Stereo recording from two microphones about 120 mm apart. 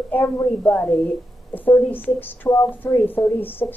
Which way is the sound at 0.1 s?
15° left (ahead or behind).